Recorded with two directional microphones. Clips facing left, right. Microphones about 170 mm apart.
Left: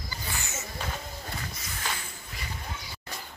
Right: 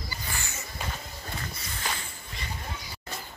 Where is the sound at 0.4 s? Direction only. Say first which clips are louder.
Left 2 dB; 20° left (ahead or behind).